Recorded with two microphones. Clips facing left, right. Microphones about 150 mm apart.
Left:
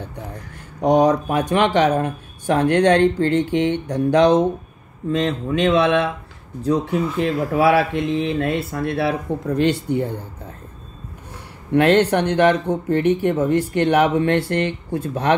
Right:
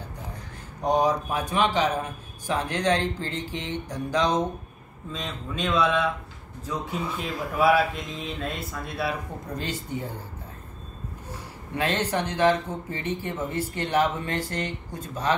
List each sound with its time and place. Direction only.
0.8 s speech: 70° left (ahead or behind)
11.7 s speech: 65° left (ahead or behind)